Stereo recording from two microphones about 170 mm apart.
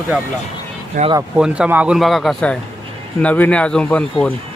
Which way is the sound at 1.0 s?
50° right (ahead or behind).